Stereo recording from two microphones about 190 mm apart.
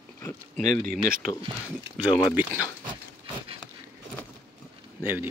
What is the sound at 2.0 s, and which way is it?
Speech, 10° right (ahead or behind).